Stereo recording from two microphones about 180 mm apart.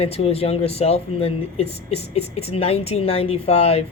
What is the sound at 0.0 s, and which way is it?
Speech, 35° left (ahead or behind).